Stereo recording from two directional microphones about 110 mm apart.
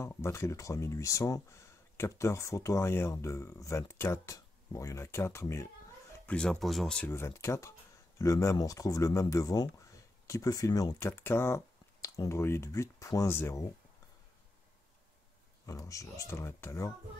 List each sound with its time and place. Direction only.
0.0 s speech: 25° left (ahead or behind)
6.1 s speech: 10° left (ahead or behind)
7.1 s speech: 25° left (ahead or behind)
11.0 s speech: 20° left (ahead or behind)
15.6 s speech: 30° left (ahead or behind)